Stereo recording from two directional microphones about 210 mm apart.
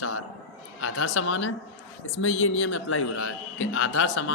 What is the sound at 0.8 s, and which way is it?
A man's voice, 80° left.